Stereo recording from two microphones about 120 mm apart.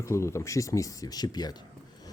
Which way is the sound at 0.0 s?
25° left (ahead or behind).